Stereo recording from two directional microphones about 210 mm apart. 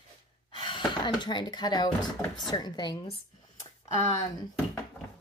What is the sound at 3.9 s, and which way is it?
Speech, 35° left (ahead or behind).